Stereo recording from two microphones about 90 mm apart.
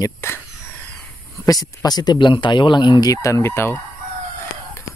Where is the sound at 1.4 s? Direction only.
45° left (ahead or behind).